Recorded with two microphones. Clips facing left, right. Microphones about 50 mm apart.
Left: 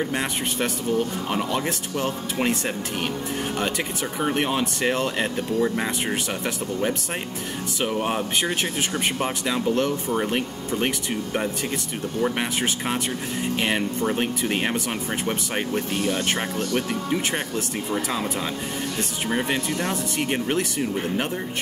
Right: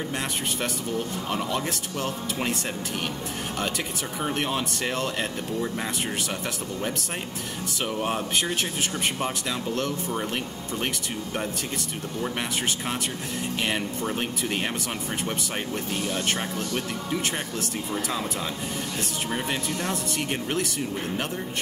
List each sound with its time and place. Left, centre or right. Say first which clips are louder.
0.1 s speech: left 3 dB; centre
4.2 s speech: left 4 dB; centre
7.8 s speech: left 3 dB; centre
12.2 s speech: left 5 dB; centre
19.2 s speech: left 6 dB; centre